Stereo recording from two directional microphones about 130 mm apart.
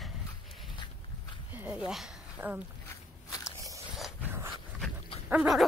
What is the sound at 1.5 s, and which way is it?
Speech, 10° right (ahead or behind).